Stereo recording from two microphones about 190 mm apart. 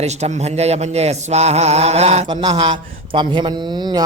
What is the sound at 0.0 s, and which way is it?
Speech, 35° right (ahead or behind).